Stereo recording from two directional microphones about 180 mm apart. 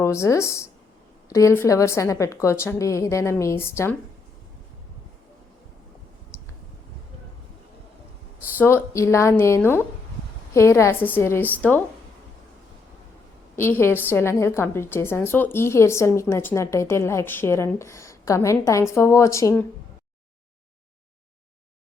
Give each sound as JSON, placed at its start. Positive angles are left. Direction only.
{"t": 0.0, "sound": "a woman's voice", "side_deg": 15}
{"t": 8.6, "sound": "a woman's voice", "side_deg": 15}
{"t": 13.6, "sound": "a woman's voice", "side_deg": 15}